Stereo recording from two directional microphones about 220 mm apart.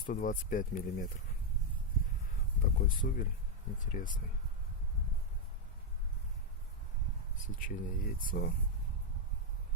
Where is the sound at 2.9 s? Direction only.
40° left (ahead or behind).